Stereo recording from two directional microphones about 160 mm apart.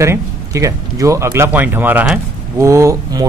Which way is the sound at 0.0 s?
20° right (ahead or behind).